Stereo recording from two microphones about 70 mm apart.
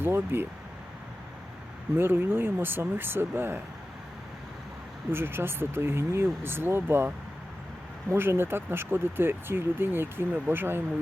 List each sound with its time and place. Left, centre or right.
0.0 s speech: right
2.0 s speech: right
5.1 s speech: right
8.1 s speech: right